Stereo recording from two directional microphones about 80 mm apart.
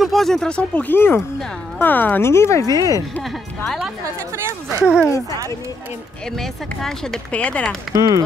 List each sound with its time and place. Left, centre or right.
0.0 s speech: centre
0.9 s speech: left
3.3 s speech: centre
4.8 s speech: centre
6.3 s speech: centre
7.9 s speech: right